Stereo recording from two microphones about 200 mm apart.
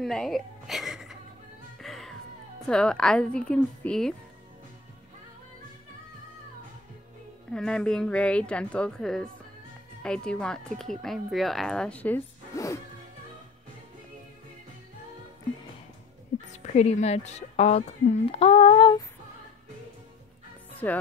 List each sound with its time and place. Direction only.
0.0 s speech: centre (ahead or behind)
1.8 s music: centre (ahead or behind)
2.6 s speech: 5° left (ahead or behind)
7.5 s speech: 5° left (ahead or behind)
16.5 s a woman's voice: 35° left (ahead or behind)
20.8 s speech: 10° left (ahead or behind)